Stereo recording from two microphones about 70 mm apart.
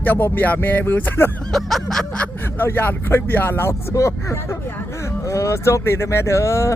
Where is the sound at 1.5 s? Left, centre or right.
Centre.